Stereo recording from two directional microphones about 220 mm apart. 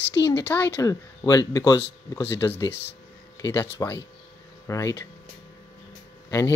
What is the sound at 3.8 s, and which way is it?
Speech, 15° left (ahead or behind).